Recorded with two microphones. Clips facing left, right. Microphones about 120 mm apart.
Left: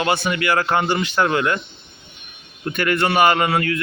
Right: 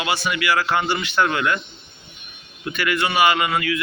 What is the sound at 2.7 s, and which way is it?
Speech, 45° left (ahead or behind).